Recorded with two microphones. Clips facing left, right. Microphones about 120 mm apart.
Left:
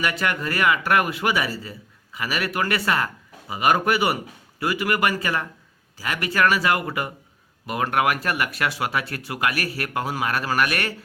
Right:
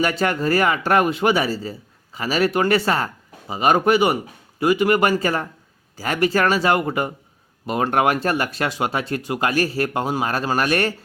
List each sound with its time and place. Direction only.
0.0 s speech: 30° right (ahead or behind)